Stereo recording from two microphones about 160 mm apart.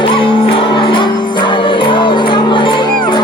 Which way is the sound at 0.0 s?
30° left (ahead or behind).